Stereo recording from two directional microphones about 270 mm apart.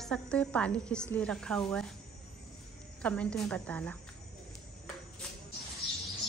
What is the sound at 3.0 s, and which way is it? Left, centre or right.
Speech, centre.